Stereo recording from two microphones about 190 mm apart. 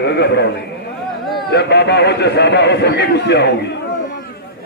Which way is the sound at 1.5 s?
60° left (ahead or behind).